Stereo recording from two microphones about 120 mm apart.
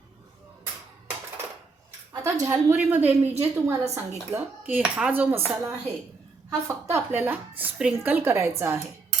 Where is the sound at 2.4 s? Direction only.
20° right (ahead or behind).